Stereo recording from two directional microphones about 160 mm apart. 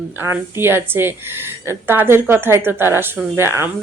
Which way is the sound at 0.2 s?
15° right (ahead or behind).